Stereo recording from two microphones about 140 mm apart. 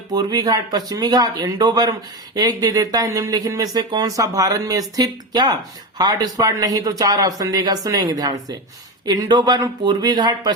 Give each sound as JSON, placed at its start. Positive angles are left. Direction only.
{"t": 0.1, "sound": "speech", "side_deg": -30}